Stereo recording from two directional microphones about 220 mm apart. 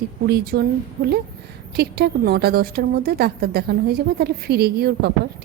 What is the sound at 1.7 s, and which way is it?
A woman's voice, 45° right (ahead or behind).